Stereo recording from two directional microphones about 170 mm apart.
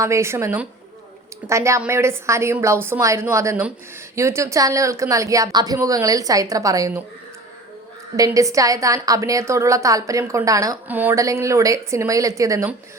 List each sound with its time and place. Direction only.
0.0 s a woman's voice: 15° right (ahead or behind)
8.1 s a woman's voice: 20° right (ahead or behind)